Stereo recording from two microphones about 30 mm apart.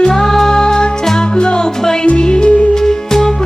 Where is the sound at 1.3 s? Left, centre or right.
Left.